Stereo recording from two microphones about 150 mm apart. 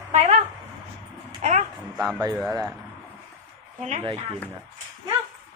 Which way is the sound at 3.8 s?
50° right (ahead or behind).